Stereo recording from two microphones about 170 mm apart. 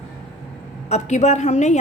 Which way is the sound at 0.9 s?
40° left (ahead or behind).